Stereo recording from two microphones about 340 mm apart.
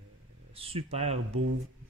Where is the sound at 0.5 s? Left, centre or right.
Centre.